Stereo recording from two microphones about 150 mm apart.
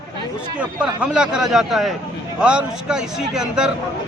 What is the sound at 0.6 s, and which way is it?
A man's voice, 5° right (ahead or behind).